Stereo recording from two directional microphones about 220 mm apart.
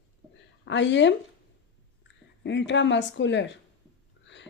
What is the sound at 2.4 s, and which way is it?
A woman's voice, 55° left (ahead or behind).